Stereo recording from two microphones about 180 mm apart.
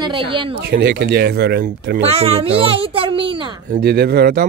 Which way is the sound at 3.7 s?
60° right (ahead or behind).